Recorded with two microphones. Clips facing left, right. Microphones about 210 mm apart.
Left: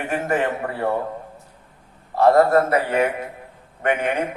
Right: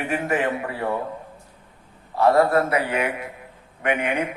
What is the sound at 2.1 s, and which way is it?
A man's voice, 45° left (ahead or behind).